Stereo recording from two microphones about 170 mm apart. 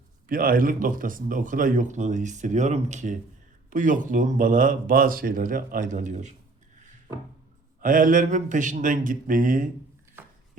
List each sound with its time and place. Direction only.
0.3 s speech: 55° right (ahead or behind)
7.8 s speech: 55° right (ahead or behind)
10.2 s a sound: 10° right (ahead or behind)